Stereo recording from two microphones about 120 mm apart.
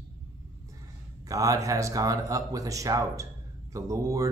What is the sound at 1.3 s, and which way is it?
Speech, 30° right (ahead or behind).